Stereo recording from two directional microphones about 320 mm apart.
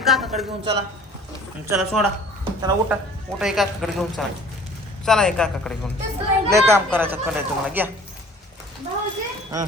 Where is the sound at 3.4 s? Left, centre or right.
Centre.